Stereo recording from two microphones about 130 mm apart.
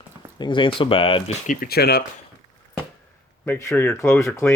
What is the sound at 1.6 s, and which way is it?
Speech, 90° left.